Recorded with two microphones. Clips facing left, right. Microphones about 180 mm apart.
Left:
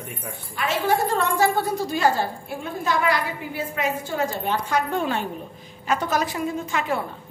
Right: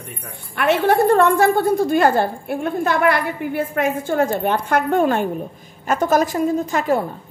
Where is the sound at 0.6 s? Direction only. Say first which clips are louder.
Right 7 dB; 60° right (ahead or behind).